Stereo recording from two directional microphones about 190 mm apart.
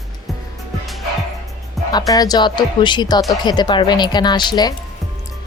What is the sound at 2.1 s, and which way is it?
Speech, 20° left (ahead or behind).